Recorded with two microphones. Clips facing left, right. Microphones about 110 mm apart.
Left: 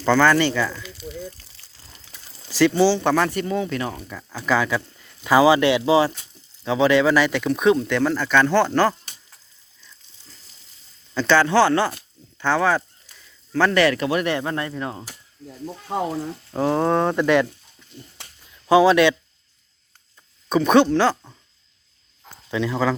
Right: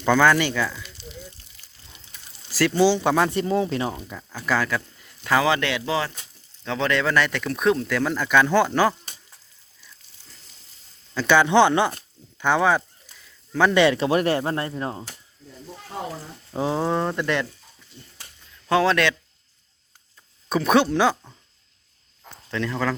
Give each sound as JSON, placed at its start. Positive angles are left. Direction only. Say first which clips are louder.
{"t": 0.0, "sound": "speech", "louder": "left 1 dB", "side_deg": -5}
{"t": 1.4, "sound": "a sound", "louder": "left 2 dB", "side_deg": 35}
{"t": 2.6, "sound": "speech", "louder": "left 4 dB", "side_deg": 0}
{"t": 2.8, "sound": "speech", "louder": "left 1 dB", "side_deg": -10}
{"t": 3.2, "sound": "speech", "louder": "right 1 dB", "side_deg": -25}
{"t": 4.3, "sound": "speech", "louder": "left 3 dB", "side_deg": 0}
{"t": 5.2, "sound": "speech", "louder": "left 6 dB", "side_deg": 10}
{"t": 11.1, "sound": "speech", "louder": "even", "side_deg": -10}
{"t": 13.1, "sound": "a sound", "louder": "left 3 dB", "side_deg": 0}
{"t": 13.7, "sound": "speech", "louder": "right 1 dB", "side_deg": -25}
{"t": 16.6, "sound": "speech", "louder": "left 4 dB", "side_deg": -10}
{"t": 18.7, "sound": "speech", "louder": "left 5 dB", "side_deg": 5}
{"t": 20.5, "sound": "speech", "louder": "left 3 dB", "side_deg": -5}
{"t": 22.4, "sound": "speech", "louder": "left 4 dB", "side_deg": 5}